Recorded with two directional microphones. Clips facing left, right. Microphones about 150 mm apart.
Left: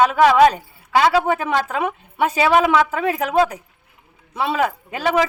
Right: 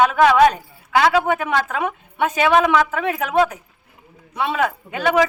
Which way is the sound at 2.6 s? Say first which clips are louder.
Left 1 dB; 5° left (ahead or behind).